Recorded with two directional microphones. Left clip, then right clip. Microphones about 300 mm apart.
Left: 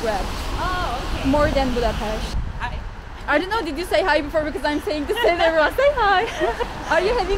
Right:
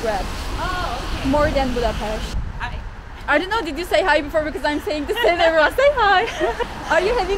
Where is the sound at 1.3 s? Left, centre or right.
Centre.